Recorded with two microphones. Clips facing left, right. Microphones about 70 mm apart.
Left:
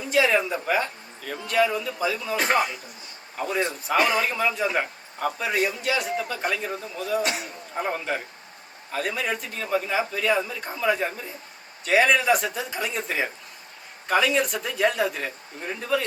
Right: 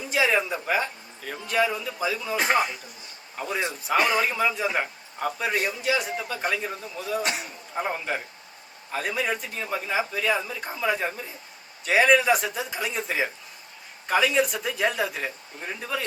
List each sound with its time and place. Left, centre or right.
0.0 s a man's voice: centre
7.3 s a man's voice: left
7.8 s a man's voice: centre